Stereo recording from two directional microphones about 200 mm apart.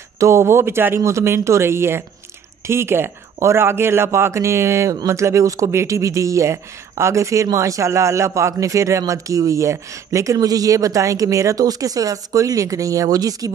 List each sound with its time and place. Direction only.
0.2 s speech: 15° right (ahead or behind)